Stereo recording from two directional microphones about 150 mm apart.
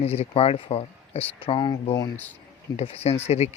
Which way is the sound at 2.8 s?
45° left (ahead or behind).